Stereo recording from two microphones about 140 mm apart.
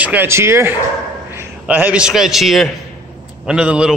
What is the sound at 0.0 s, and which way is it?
A man's voice, 15° right (ahead or behind).